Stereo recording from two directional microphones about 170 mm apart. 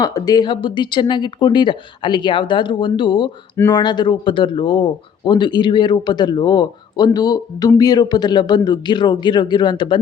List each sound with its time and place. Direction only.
0.0 s speech: 25° left (ahead or behind)